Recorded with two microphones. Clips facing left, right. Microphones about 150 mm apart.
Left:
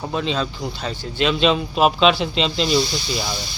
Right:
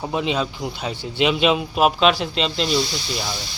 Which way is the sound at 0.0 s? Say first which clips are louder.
Right 1 dB; 15° right (ahead or behind).